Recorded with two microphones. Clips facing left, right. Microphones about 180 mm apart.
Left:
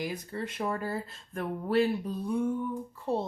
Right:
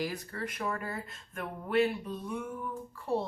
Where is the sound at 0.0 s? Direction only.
20° left (ahead or behind).